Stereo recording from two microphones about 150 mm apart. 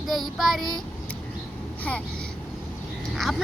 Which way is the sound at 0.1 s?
Centre (ahead or behind).